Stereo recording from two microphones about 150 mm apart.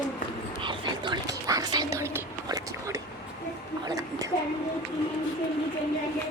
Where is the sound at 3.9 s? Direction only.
25° right (ahead or behind).